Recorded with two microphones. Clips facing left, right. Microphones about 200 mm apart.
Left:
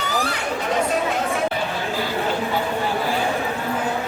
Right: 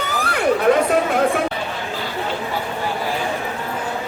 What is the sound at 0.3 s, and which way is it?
Chatter, 55° right (ahead or behind).